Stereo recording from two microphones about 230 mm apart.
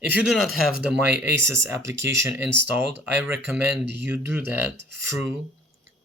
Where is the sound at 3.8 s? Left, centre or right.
Right.